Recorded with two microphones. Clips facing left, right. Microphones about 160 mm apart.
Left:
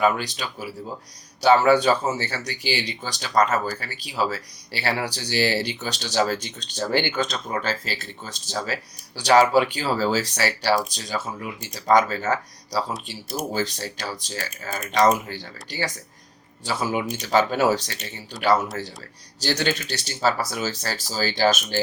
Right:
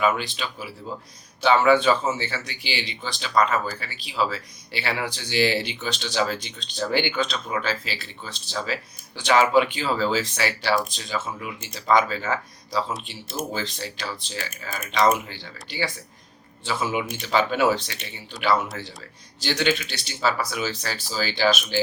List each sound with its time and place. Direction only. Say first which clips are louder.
0.0 s speech: left 1 dB; 40° left (ahead or behind)